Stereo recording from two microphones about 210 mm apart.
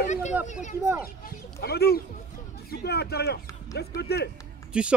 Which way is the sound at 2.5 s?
50° left (ahead or behind).